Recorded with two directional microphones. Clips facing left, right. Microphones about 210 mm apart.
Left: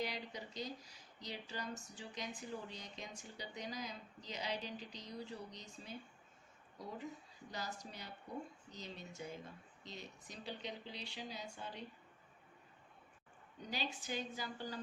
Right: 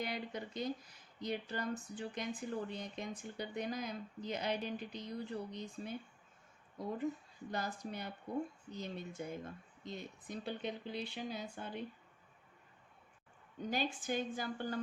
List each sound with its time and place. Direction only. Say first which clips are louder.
0.0 s speech: right 3 dB; 55° right (ahead or behind)
13.7 s speech: right 6 dB; 50° right (ahead or behind)